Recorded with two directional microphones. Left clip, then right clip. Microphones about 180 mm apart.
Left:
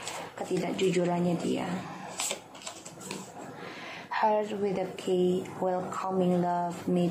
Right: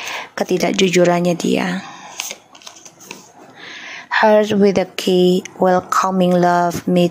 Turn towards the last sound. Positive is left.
turn(degrees=-60)  # may be behind; listen again after turning